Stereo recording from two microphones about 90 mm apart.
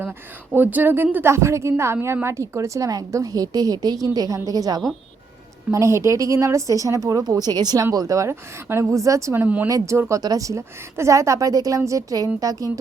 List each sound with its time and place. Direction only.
0.5 s a woman's voice: 20° right (ahead or behind); by 4.8 s 45° right (ahead or behind)
5.7 s a woman's voice: 35° right (ahead or behind)